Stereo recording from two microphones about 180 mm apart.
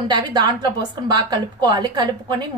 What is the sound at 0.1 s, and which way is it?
A woman's voice, 25° right (ahead or behind).